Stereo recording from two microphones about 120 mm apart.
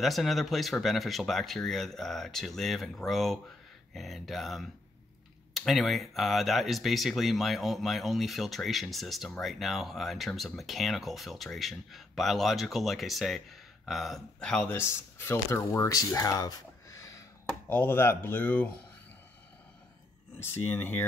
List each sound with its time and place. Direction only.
0.0 s speech: centre (ahead or behind)
14.8 s speech: 20° left (ahead or behind)
17.6 s speech: 15° left (ahead or behind)
20.3 s speech: 20° left (ahead or behind)